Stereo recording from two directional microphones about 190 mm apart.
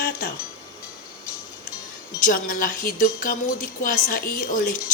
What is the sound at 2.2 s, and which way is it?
A woman's voice, 45° left (ahead or behind).